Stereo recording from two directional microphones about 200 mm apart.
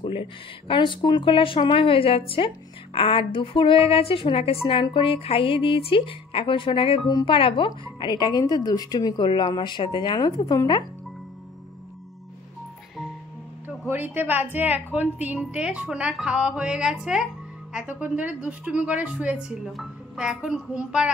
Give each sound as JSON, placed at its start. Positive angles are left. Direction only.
{"t": 0.0, "sound": "speech", "side_deg": 25}
{"t": 13.8, "sound": "a woman's voice", "side_deg": -10}